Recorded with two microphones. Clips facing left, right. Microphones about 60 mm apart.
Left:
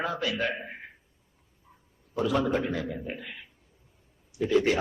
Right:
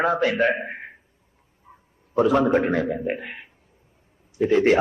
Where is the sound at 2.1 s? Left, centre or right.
Right.